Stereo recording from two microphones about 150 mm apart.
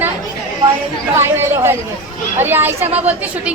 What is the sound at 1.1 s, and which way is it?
A woman's voice, 15° right (ahead or behind).